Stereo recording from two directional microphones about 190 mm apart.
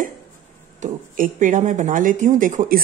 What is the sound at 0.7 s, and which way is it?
A woman's voice, 40° right (ahead or behind).